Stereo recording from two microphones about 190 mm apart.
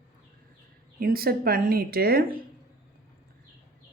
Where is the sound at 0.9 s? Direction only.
50° right (ahead or behind).